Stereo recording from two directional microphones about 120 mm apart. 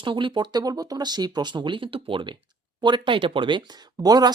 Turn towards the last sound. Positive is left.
turn(degrees=-35)  # may be behind; listen again after turning